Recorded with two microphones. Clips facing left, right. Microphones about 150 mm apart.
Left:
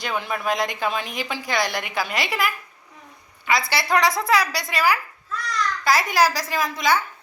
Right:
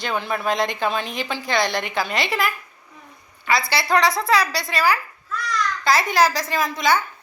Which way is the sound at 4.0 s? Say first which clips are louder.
Right 1 dB; 15° left (ahead or behind).